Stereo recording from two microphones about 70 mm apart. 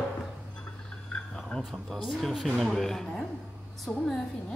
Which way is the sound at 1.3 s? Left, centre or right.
Centre.